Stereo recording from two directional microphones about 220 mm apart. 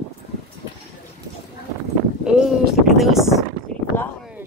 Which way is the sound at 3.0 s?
Centre (ahead or behind).